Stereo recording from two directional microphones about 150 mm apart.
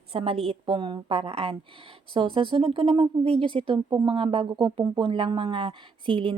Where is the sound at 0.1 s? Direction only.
40° right (ahead or behind).